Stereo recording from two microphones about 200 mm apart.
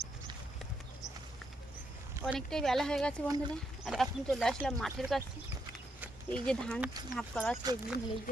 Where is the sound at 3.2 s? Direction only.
20° right (ahead or behind).